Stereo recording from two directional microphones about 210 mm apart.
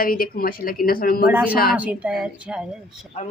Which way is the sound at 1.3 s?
5° right (ahead or behind).